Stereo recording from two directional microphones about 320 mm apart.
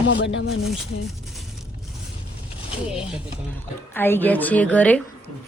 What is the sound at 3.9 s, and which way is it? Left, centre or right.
Speech, centre.